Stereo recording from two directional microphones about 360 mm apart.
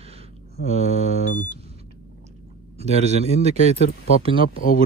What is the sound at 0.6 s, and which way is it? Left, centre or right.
Speech, centre.